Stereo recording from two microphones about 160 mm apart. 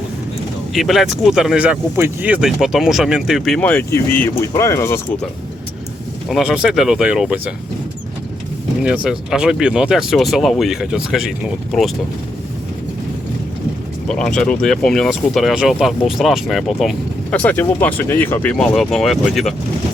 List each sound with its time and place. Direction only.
0.7 s speech: centre (ahead or behind)
3.6 s speech: 10° left (ahead or behind)
6.2 s speech: centre (ahead or behind)
8.8 s speech: 5° right (ahead or behind)
14.1 s speech: 5° left (ahead or behind)